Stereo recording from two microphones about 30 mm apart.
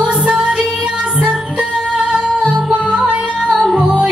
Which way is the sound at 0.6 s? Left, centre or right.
Centre.